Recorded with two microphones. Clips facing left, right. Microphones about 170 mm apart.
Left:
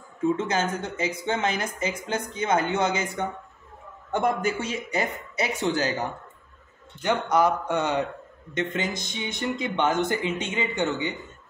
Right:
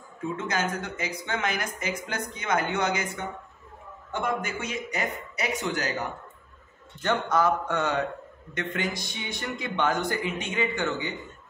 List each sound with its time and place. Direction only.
0.4 s speech: 25° left (ahead or behind)
4.1 s speech: 35° left (ahead or behind)
7.0 s speech: 15° left (ahead or behind)